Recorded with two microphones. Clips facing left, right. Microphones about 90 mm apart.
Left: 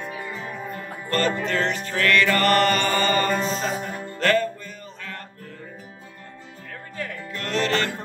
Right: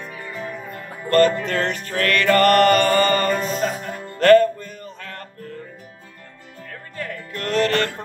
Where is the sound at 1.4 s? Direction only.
50° right (ahead or behind).